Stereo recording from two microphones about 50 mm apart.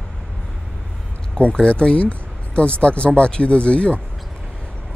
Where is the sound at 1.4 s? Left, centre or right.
Left.